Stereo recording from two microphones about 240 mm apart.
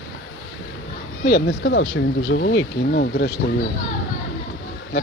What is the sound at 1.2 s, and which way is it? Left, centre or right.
Speech, left.